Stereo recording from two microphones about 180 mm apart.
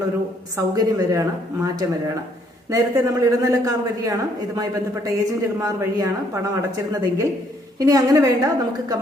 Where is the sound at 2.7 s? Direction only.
20° right (ahead or behind).